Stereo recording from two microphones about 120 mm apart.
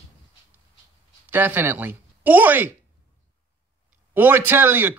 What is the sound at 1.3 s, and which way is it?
Speech, 15° right (ahead or behind).